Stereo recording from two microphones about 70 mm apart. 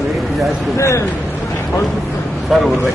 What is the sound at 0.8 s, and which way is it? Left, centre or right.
Speech, left.